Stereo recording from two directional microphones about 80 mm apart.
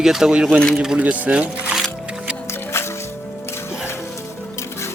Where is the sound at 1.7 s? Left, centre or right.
Centre.